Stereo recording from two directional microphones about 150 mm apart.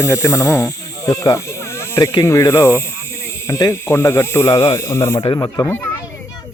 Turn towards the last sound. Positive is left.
turn(degrees=15)  # may be behind; listen again after turning